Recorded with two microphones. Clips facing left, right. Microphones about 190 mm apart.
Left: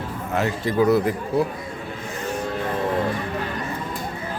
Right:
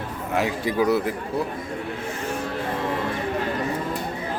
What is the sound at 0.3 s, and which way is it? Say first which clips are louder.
Speech: left 2 dB; 10° right (ahead or behind).